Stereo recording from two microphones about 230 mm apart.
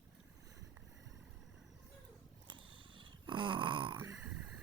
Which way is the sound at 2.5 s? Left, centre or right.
Right.